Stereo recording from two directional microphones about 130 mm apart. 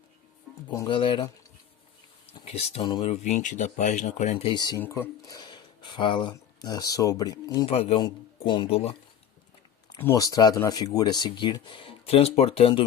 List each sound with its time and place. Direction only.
0.9 s speech: 40° left (ahead or behind)
2.4 s speech: 50° left (ahead or behind)
4.4 s speech: 35° left (ahead or behind)
4.8 s speech: 20° left (ahead or behind)
7.7 s speech: 50° left (ahead or behind)
10.2 s speech: 30° left (ahead or behind); by 12.8 s 45° left (ahead or behind)